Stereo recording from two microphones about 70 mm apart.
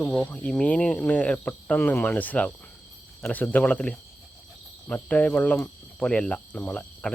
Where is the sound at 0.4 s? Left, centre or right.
Centre.